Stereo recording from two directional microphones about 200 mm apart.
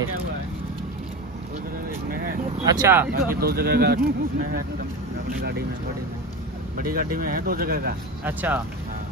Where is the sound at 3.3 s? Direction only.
50° right (ahead or behind).